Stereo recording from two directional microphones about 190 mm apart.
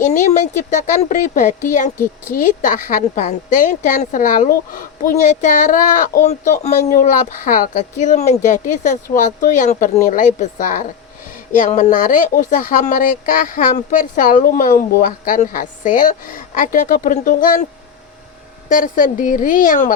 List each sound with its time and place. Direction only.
0.0 s speech: 40° left (ahead or behind)
18.7 s speech: 45° left (ahead or behind)